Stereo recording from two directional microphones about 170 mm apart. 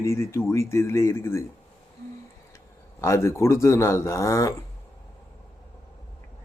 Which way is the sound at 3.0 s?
15° left (ahead or behind).